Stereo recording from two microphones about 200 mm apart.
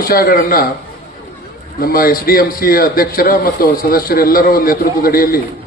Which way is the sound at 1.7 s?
45° left (ahead or behind).